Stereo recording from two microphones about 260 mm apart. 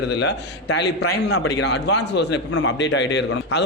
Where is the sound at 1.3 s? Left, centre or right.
Left.